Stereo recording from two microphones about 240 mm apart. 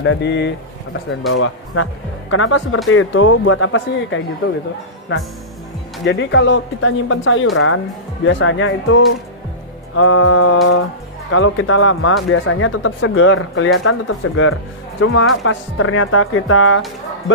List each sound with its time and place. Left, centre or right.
0.0 s speech: left
1.3 s speech: left
5.1 s speech: left